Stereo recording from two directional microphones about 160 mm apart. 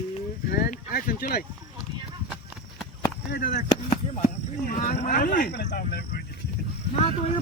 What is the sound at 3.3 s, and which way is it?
Speech, 70° left (ahead or behind).